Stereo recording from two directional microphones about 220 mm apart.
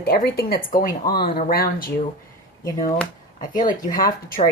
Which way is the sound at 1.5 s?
40° left (ahead or behind).